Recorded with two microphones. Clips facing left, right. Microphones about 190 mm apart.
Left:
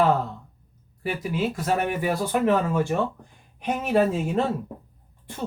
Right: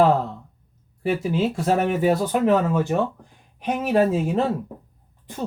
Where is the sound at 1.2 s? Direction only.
30° right (ahead or behind).